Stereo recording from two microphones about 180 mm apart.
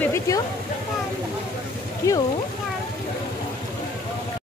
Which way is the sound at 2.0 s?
15° left (ahead or behind).